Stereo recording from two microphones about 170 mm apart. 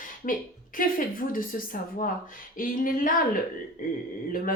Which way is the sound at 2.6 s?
55° left (ahead or behind).